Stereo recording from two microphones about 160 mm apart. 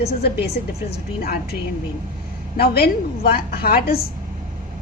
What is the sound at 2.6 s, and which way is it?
A woman's voice, 75° left (ahead or behind).